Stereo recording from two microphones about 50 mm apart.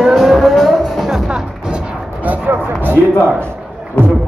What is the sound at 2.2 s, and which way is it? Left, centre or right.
Music, right.